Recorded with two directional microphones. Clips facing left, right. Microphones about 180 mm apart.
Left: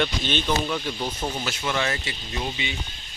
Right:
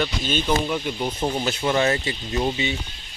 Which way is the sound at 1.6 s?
35° right (ahead or behind).